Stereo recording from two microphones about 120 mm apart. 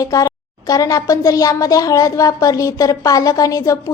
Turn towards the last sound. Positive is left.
turn(degrees=30)  # may be behind; listen again after turning